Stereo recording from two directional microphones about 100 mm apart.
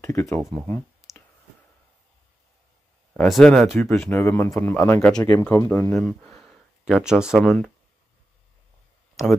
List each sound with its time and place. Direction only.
0.0 s speech: 30° left (ahead or behind)
0.4 s speech: 5° left (ahead or behind)
3.2 s speech: 5° left (ahead or behind)
4.0 s speech: 25° left (ahead or behind)
5.9 s speech: 5° left (ahead or behind)
9.2 s speech: centre (ahead or behind)